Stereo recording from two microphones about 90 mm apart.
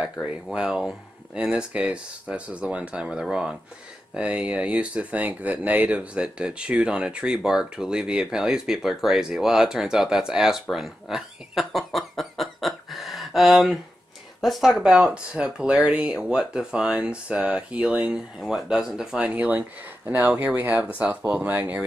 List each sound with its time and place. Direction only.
0.2 s speech: 5° right (ahead or behind)